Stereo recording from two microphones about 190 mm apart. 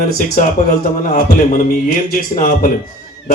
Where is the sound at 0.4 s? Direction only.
40° left (ahead or behind).